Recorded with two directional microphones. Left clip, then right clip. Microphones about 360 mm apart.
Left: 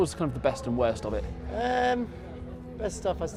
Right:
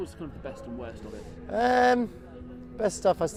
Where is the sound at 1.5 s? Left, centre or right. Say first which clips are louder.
Right 4 dB; right.